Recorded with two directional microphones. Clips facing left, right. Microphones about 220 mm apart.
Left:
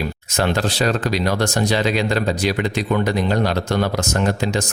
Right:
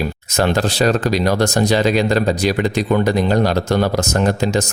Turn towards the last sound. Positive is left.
turn(degrees=-40)  # may be behind; listen again after turning